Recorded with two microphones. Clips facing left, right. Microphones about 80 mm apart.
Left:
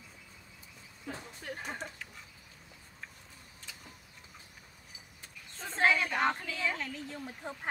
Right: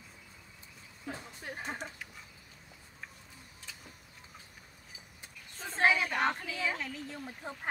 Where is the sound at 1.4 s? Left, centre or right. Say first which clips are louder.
Even; centre.